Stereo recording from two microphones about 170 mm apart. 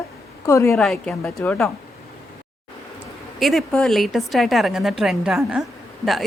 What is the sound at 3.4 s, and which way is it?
A woman's voice, centre (ahead or behind).